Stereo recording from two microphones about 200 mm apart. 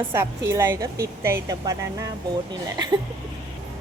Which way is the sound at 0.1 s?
15° right (ahead or behind).